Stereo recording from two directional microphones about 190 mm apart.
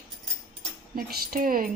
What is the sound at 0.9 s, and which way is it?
Speech, 50° right (ahead or behind).